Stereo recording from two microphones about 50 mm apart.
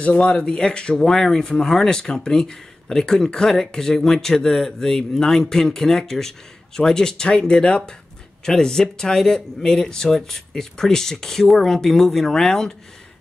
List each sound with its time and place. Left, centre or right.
0.0 s speech: left